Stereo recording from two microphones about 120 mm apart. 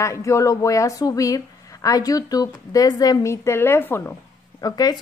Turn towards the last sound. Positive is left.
turn(degrees=30)  # may be behind; listen again after turning